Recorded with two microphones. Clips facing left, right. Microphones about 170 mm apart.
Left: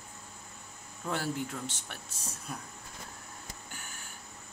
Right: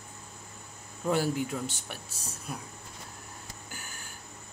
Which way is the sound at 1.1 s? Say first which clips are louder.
Right 6 dB; 10° right (ahead or behind).